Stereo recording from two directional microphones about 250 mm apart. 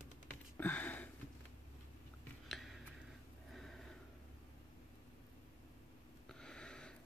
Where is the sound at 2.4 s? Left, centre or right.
Centre.